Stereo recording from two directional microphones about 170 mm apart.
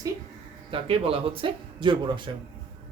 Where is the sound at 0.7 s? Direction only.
35° right (ahead or behind).